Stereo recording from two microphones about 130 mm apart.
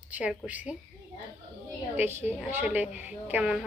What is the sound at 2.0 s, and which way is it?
Speech, 15° right (ahead or behind).